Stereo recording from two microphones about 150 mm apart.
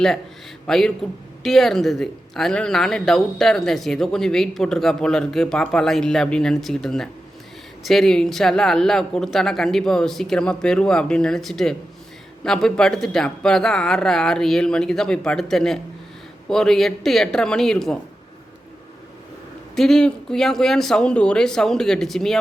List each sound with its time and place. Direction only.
0.7 s speech: 5° left (ahead or behind)
19.7 s speech: centre (ahead or behind)